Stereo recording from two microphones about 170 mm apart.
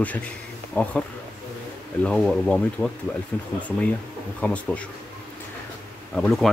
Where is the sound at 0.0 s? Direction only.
10° left (ahead or behind).